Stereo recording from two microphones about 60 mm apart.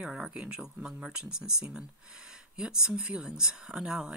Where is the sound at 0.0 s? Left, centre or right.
Centre.